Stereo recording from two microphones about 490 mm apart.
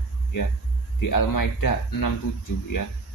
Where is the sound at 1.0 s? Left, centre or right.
Left.